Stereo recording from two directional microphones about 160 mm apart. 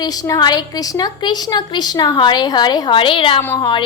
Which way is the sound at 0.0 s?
25° left (ahead or behind).